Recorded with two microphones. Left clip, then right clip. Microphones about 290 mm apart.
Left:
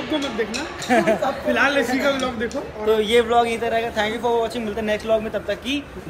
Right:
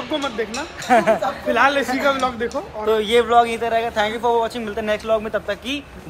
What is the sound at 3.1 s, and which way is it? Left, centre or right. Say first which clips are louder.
A man's voice: right 4 dB; centre.